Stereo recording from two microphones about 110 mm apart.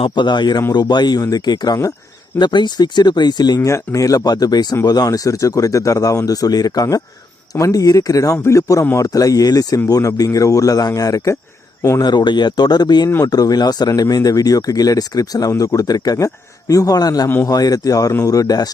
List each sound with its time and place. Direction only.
0.0 s speech: 45° left (ahead or behind)
17.2 s a man's voice: 20° left (ahead or behind)
17.5 s speech: 35° left (ahead or behind)